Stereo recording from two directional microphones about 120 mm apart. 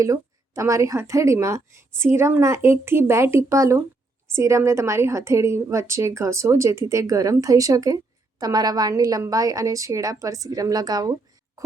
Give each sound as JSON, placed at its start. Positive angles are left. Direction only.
{"t": 0.0, "sound": "a woman's voice", "side_deg": -25}